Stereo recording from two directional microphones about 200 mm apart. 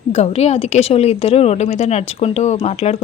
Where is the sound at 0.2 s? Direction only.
30° left (ahead or behind).